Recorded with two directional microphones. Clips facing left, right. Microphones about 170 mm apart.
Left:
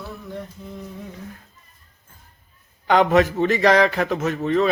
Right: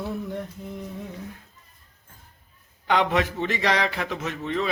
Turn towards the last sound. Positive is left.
turn(degrees=45)  # may be behind; listen again after turning